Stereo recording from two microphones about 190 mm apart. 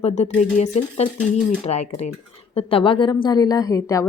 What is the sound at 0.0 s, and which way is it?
A woman's voice, 35° left (ahead or behind).